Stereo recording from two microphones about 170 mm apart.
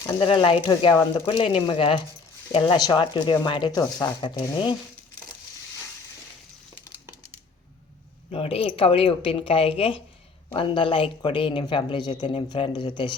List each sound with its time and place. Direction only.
0.2 s a woman's voice: 30° left (ahead or behind)
8.3 s a woman's voice: 35° left (ahead or behind)